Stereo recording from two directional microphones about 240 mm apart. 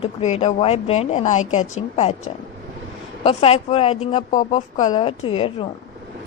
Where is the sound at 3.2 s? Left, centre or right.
Left.